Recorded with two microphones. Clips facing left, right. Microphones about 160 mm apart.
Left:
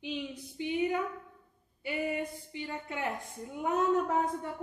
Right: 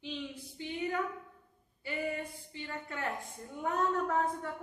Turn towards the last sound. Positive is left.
turn(degrees=15)  # may be behind; listen again after turning